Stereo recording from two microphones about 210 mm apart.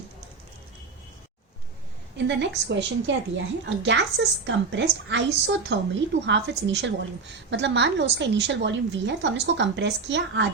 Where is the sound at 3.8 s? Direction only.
55° right (ahead or behind).